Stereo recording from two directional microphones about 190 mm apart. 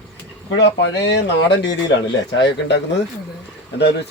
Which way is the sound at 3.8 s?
60° left (ahead or behind).